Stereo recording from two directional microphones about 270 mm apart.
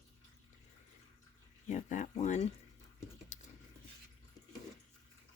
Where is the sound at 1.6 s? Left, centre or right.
Left.